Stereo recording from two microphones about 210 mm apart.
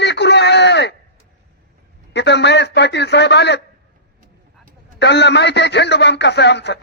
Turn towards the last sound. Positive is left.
turn(degrees=55)  # may be behind; listen again after turning